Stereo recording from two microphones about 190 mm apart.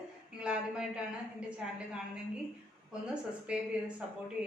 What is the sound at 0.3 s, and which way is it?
A woman's voice, 5° right (ahead or behind).